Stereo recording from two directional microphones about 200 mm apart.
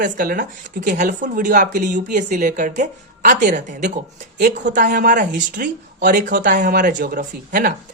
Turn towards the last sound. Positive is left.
turn(degrees=-45)  # may be behind; listen again after turning